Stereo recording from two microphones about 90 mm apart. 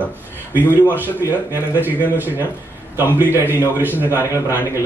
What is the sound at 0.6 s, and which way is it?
A man's voice, 20° right (ahead or behind).